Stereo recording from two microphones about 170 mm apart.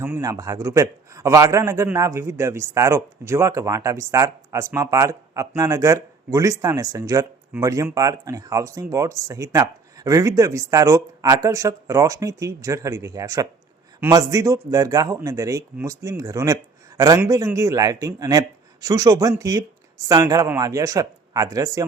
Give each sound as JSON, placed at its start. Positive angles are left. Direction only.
{"t": 0.0, "sound": "a man's voice", "side_deg": -15}